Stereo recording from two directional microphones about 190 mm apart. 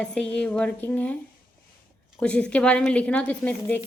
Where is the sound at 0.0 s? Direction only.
5° left (ahead or behind).